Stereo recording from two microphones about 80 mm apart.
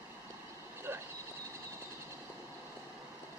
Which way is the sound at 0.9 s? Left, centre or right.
Right.